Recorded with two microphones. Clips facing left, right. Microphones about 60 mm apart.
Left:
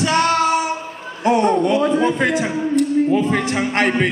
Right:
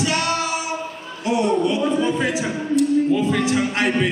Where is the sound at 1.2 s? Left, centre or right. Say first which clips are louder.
Left 4 dB; left.